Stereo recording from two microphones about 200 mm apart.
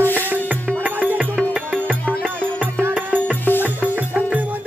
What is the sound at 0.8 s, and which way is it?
Music, 10° right (ahead or behind).